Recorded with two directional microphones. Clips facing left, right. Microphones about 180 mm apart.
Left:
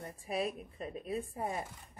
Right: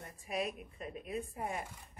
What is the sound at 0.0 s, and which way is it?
Speech, 35° left (ahead or behind).